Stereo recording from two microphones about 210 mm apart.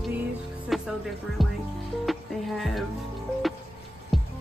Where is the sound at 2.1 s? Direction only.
Centre (ahead or behind).